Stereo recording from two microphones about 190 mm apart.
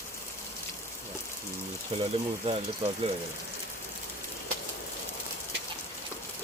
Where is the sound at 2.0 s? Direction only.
30° right (ahead or behind).